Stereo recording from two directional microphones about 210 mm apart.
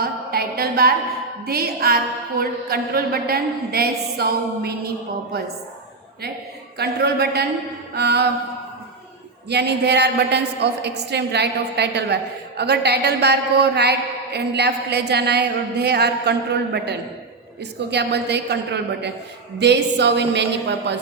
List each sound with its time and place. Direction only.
0.0 s a sound: 45° right (ahead or behind)
1.5 s a woman's voice: 45° right (ahead or behind)
6.7 s a woman's voice: 50° right (ahead or behind)
9.5 s a woman's voice: 50° right (ahead or behind)